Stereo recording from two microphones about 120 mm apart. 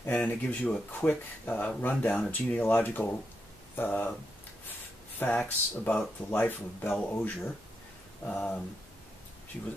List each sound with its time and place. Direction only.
0.0 s speech: 15° left (ahead or behind)
5.2 s speech: 10° left (ahead or behind)